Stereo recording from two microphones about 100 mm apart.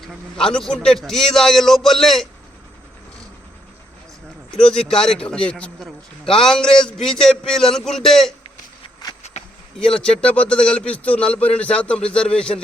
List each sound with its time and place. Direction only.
0.0 s a man's voice: 5° left (ahead or behind)
4.5 s a man's voice: 5° left (ahead or behind)
9.0 s insect: 40° left (ahead or behind)
9.9 s a man's voice: 10° left (ahead or behind)